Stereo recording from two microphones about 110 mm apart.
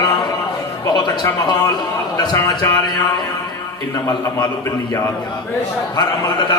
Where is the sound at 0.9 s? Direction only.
40° left (ahead or behind).